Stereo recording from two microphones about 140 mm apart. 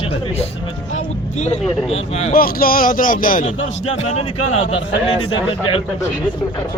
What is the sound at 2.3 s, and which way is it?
Speech, 90° left.